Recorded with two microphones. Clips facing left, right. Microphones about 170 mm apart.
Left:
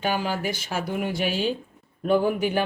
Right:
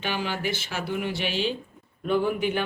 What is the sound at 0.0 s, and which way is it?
Speech, 40° left (ahead or behind).